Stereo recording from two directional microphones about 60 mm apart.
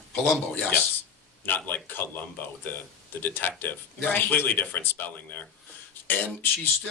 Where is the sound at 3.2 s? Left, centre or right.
Left.